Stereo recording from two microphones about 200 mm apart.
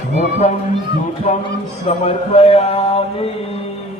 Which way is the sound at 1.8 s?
30° left (ahead or behind).